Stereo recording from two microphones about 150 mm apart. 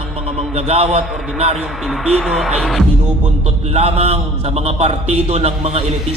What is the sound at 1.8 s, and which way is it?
Speech, centre (ahead or behind).